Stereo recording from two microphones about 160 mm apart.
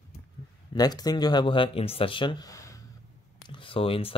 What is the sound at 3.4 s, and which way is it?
Speech, 30° left (ahead or behind).